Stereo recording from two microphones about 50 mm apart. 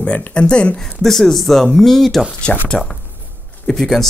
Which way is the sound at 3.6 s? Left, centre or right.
Centre.